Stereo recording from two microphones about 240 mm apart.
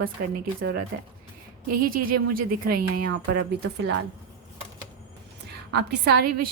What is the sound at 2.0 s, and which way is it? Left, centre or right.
Speech, right.